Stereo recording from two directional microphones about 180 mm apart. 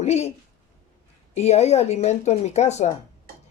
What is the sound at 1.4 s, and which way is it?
Speech, 35° left (ahead or behind).